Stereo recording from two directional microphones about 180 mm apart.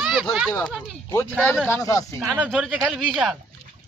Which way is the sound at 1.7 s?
20° left (ahead or behind).